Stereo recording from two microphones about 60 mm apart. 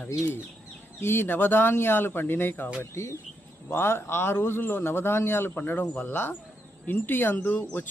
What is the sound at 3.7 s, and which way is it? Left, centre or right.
Speech, left.